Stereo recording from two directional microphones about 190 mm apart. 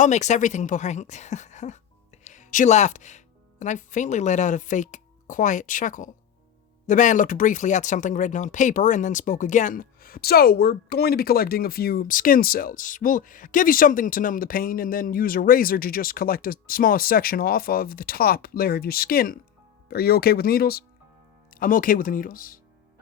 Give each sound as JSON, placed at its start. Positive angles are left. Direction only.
{"t": 0.0, "sound": "a woman's voice", "side_deg": 40}